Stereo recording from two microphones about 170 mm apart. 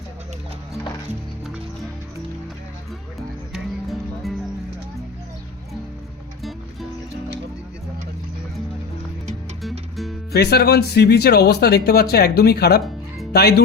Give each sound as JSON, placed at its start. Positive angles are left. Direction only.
{"t": 3.5, "sound": "music", "side_deg": 0}
{"t": 9.6, "sound": "music", "side_deg": 0}
{"t": 10.3, "sound": "speech", "side_deg": 70}